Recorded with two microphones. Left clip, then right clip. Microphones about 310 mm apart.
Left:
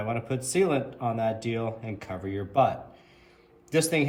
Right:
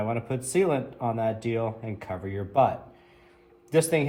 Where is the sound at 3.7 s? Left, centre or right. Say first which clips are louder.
Right 2 dB; centre.